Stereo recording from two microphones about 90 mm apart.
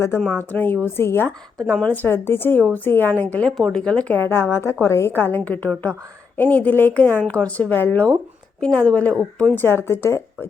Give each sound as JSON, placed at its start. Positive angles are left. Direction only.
{"t": 0.3, "sound": "a woman's voice", "side_deg": 20}
{"t": 1.5, "sound": "a woman's voice", "side_deg": 15}
{"t": 4.2, "sound": "a woman's voice", "side_deg": 25}
{"t": 9.6, "sound": "a woman's voice", "side_deg": 25}